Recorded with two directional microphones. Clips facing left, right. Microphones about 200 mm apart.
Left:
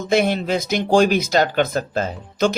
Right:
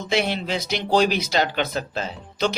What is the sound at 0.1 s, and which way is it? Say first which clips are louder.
Speech: left 5 dB; 50° left (ahead or behind).